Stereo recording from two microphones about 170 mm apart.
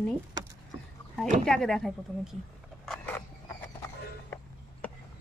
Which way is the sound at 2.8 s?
Centre (ahead or behind).